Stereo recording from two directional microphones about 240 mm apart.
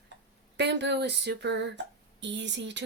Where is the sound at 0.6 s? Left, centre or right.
Right.